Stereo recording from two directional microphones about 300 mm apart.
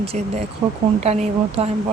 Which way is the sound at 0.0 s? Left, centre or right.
Centre.